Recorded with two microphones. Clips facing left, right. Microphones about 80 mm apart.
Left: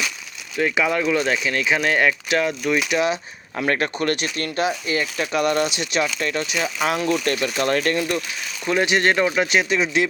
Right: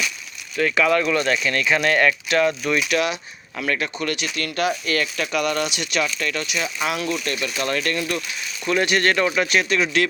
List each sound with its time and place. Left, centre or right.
0.5 s speech: centre
2.9 s speech: left
3.6 s speech: left; by 10.1 s centre